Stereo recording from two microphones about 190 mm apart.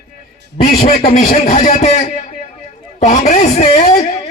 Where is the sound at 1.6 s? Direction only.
35° left (ahead or behind).